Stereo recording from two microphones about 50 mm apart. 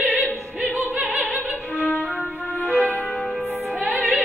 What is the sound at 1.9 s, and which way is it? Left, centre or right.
Music, left.